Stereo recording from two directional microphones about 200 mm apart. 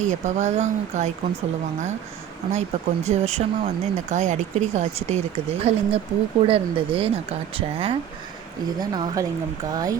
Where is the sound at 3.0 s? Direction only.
35° right (ahead or behind); by 9.9 s 20° right (ahead or behind).